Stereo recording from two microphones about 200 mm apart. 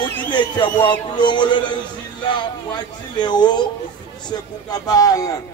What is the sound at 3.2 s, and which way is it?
Speech, 20° left (ahead or behind).